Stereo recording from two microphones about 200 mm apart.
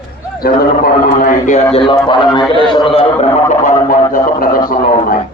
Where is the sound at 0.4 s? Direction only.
50° left (ahead or behind).